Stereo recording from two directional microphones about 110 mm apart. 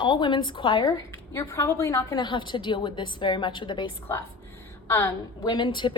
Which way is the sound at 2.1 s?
45° left (ahead or behind).